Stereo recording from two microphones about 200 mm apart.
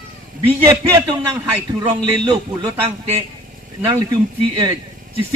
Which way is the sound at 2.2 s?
25° right (ahead or behind).